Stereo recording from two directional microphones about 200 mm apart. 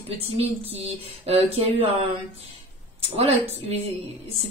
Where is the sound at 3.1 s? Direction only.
30° right (ahead or behind).